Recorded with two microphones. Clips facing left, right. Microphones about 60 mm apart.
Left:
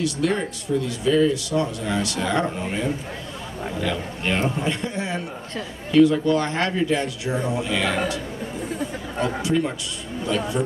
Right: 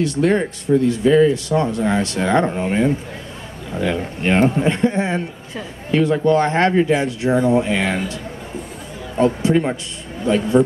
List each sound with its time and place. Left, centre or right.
0.0 s speech: right
9.2 s speech: right